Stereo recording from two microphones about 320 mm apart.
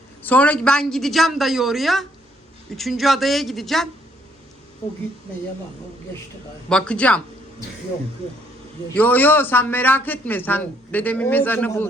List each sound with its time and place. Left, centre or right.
0.2 s a man's voice: centre
6.7 s a man's voice: centre
9.0 s a man's voice: centre